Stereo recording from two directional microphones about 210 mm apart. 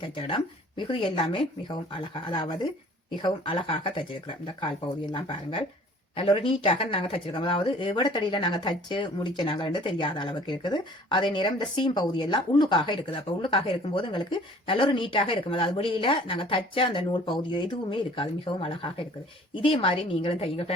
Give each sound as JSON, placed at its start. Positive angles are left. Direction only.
{"t": 0.2, "sound": "speech", "side_deg": 25}